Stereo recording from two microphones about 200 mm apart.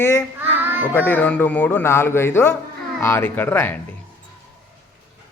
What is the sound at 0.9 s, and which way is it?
Speech, 10° left (ahead or behind).